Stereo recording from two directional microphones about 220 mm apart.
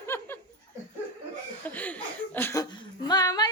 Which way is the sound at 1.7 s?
5° left (ahead or behind).